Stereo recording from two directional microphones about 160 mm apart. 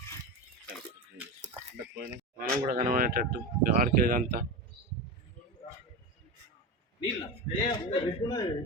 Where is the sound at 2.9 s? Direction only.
60° right (ahead or behind).